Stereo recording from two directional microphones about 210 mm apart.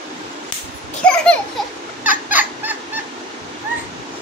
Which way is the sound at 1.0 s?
5° left (ahead or behind).